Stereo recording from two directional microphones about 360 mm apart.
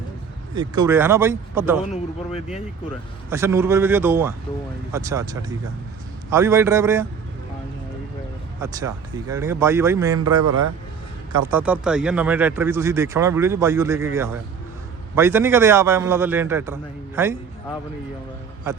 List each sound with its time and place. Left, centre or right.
0.5 s speech: centre
3.2 s speech: centre
8.6 s speech: centre
18.7 s a man's voice: centre